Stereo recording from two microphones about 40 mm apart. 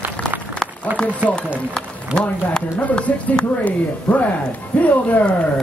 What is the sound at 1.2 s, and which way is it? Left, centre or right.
Speech, right.